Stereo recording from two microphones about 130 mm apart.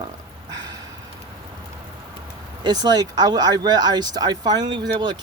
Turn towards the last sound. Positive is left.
turn(degrees=-35)  # may be behind; listen again after turning